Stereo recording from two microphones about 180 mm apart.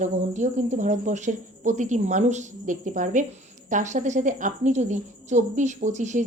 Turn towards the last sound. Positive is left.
turn(degrees=-40)  # may be behind; listen again after turning